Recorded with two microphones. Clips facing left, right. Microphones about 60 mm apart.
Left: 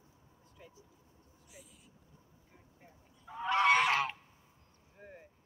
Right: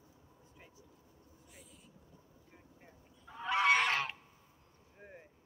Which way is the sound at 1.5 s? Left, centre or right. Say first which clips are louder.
Left 3 dB; centre.